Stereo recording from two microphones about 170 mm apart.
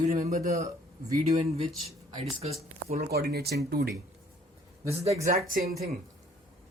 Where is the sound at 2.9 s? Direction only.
65° right (ahead or behind).